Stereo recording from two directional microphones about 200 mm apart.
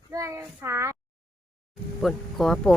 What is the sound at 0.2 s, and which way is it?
Speech, 15° right (ahead or behind).